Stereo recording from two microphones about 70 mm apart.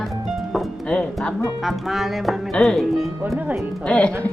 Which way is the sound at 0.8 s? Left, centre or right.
Centre.